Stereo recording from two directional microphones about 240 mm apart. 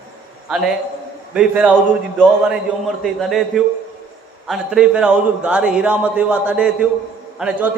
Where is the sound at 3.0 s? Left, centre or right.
Centre.